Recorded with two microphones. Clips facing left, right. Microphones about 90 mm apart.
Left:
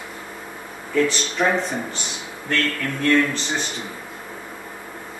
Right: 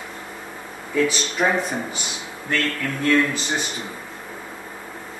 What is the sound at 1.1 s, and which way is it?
Speech, 10° right (ahead or behind).